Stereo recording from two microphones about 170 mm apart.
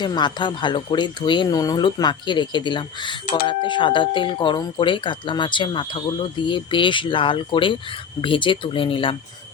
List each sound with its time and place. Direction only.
0.0 s speech: 25° left (ahead or behind)